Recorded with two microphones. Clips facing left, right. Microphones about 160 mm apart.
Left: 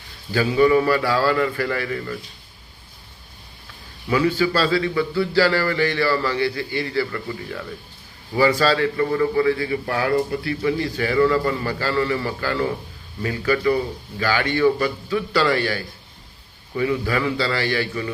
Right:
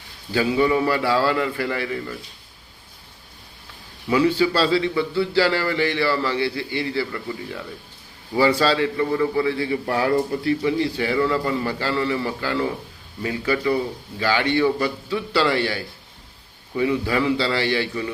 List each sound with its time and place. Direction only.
0.3 s a man's voice: 15° right (ahead or behind)
4.1 s a man's voice: 20° right (ahead or behind)